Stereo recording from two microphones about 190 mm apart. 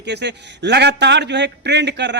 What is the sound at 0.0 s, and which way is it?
A man's voice, 65° right (ahead or behind).